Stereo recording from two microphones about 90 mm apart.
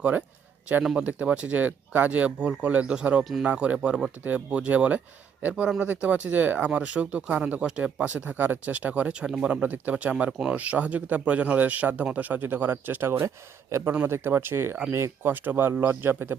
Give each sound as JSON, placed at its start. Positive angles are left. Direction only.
{"t": 0.0, "sound": "speech", "side_deg": -15}